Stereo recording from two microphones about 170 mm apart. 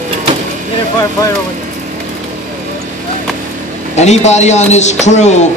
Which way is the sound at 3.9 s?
40° left (ahead or behind).